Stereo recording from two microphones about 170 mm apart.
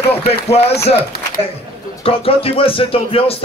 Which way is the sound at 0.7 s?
70° left (ahead or behind).